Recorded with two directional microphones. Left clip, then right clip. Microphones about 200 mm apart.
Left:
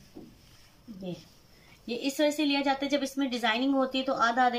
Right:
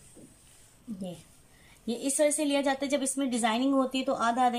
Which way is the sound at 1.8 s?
25° right (ahead or behind).